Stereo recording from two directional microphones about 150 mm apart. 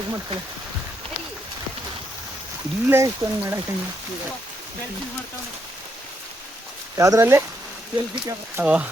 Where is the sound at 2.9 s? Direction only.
20° right (ahead or behind).